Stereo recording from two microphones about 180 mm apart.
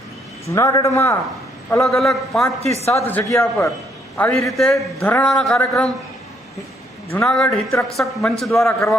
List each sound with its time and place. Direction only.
0.4 s a man's voice: 15° left (ahead or behind)
2.0 s a man's voice: centre (ahead or behind)
2.8 s a man's voice: 10° left (ahead or behind)
7.1 s a man's voice: 5° left (ahead or behind)